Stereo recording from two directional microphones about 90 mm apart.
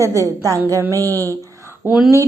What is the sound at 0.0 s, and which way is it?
A child's voice, 35° right (ahead or behind).